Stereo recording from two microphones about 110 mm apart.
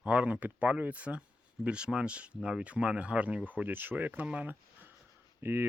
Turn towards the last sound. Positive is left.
turn(degrees=-20)  # may be behind; listen again after turning